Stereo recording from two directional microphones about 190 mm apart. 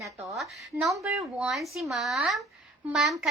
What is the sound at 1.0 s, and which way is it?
A woman's voice, 15° right (ahead or behind).